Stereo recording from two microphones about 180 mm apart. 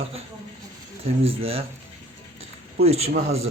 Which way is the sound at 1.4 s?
30° right (ahead or behind).